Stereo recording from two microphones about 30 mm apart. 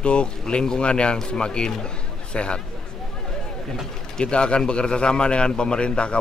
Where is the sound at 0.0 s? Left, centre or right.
Left.